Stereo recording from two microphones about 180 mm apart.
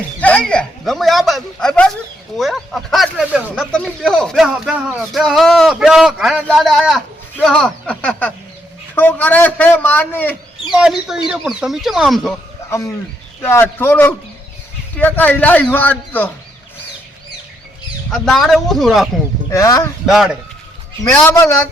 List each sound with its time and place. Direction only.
0.2 s a man's voice: 5° left (ahead or behind)
10.7 s speech: 5° right (ahead or behind)
13.4 s a man's voice: 15° left (ahead or behind)
18.1 s speech: centre (ahead or behind)
19.5 s speech: 20° left (ahead or behind)
20.1 s speech: centre (ahead or behind)